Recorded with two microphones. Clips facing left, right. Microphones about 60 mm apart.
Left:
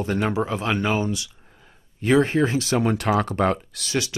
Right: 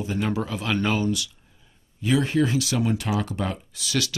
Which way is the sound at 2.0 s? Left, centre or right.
Left.